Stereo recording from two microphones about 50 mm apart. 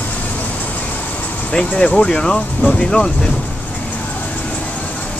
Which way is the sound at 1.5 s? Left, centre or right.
Left.